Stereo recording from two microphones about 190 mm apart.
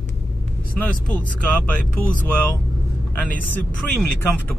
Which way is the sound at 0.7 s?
10° left (ahead or behind).